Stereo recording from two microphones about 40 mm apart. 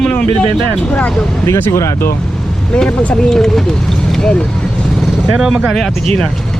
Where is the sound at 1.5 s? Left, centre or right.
Left.